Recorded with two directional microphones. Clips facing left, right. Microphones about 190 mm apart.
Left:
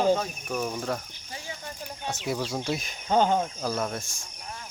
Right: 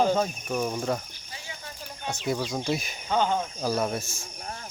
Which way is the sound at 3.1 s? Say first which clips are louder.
Left 3 dB; 40° left (ahead or behind).